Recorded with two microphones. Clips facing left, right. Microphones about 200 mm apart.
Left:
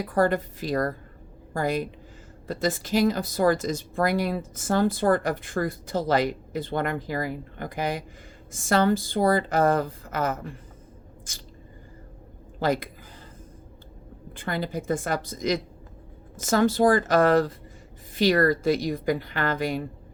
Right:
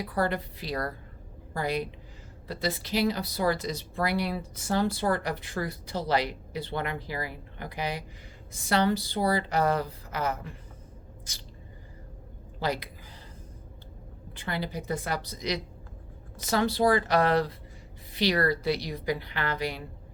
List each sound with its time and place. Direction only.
0.0 s speech: 45° left (ahead or behind)
12.5 s a woman's voice: 50° left (ahead or behind)
14.3 s speech: 50° left (ahead or behind)